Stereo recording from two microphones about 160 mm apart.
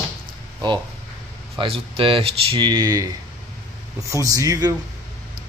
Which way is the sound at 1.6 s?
35° right (ahead or behind).